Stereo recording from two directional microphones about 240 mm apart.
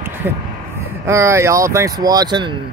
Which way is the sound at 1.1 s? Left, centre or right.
Centre.